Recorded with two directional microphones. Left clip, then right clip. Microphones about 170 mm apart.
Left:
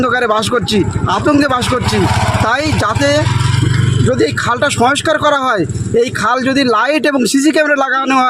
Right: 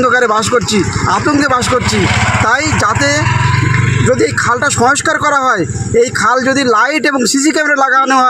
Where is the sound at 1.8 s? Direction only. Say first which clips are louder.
Right 2 dB; 55° left (ahead or behind).